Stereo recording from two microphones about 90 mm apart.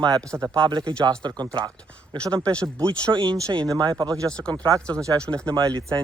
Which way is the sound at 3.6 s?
50° right (ahead or behind).